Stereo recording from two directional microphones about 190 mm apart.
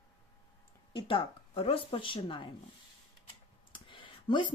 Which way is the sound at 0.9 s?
25° left (ahead or behind).